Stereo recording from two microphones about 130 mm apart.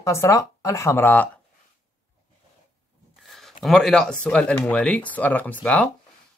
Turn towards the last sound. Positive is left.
turn(degrees=10)  # may be behind; listen again after turning